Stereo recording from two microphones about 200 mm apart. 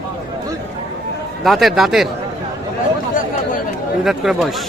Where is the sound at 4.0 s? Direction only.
Centre (ahead or behind).